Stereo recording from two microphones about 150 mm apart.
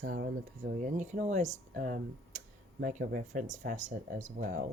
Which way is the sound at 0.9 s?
50° right (ahead or behind).